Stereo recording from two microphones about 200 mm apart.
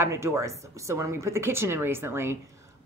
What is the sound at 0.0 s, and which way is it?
A woman's voice, 15° right (ahead or behind).